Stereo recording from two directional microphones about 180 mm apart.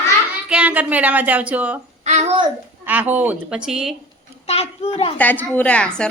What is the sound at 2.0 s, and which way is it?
Speech, 35° right (ahead or behind).